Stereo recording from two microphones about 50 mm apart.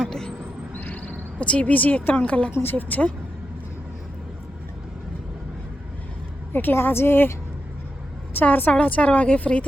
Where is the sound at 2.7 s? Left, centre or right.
Left.